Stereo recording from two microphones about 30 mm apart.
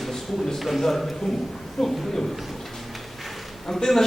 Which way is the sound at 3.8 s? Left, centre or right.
Centre.